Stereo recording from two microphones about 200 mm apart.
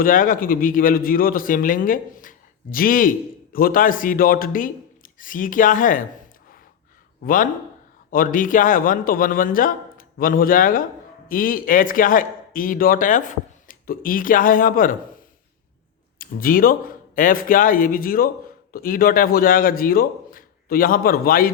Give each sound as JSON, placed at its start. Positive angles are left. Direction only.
{"t": 0.0, "sound": "a man's voice", "side_deg": 40}
{"t": 8.1, "sound": "a man's voice", "side_deg": 45}
{"t": 16.1, "sound": "a man's voice", "side_deg": 45}